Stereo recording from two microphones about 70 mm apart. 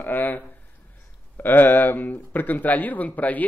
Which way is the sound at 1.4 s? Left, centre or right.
Left.